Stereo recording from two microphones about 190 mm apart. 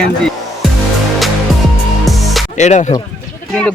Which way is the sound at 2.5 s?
40° left (ahead or behind).